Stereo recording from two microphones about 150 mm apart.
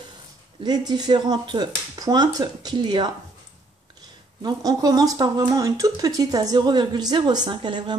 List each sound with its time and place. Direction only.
0.7 s speech: 25° right (ahead or behind)
4.4 s speech: 25° right (ahead or behind)